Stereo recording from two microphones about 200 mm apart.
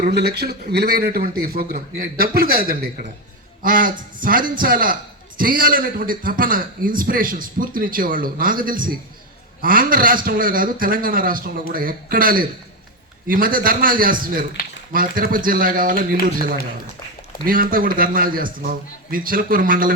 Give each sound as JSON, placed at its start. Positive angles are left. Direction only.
{"t": 0.0, "sound": "a man's voice", "side_deg": -55}